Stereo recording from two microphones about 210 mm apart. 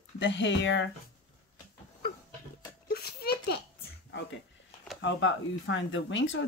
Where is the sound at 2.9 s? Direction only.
50° left (ahead or behind).